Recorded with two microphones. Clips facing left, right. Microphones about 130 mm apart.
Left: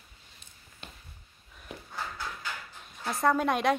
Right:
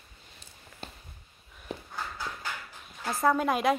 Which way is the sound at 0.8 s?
35° right (ahead or behind).